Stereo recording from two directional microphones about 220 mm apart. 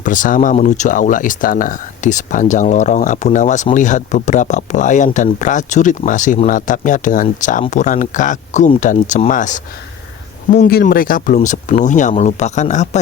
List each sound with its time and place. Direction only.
0.0 s speech: 35° left (ahead or behind)